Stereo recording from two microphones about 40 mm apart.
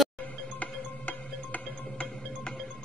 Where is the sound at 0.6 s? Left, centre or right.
Left.